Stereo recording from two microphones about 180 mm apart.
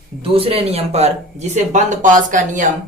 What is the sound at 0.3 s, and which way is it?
Speech, 30° right (ahead or behind).